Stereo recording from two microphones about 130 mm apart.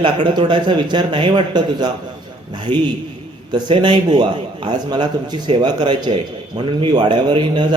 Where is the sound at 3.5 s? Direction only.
35° right (ahead or behind).